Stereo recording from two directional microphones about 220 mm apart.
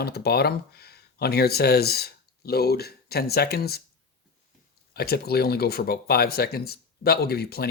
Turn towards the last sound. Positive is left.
turn(degrees=45)  # may be behind; listen again after turning